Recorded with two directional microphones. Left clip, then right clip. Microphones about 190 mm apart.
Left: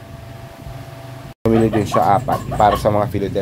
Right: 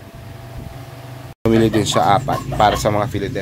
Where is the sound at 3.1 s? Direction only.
20° left (ahead or behind).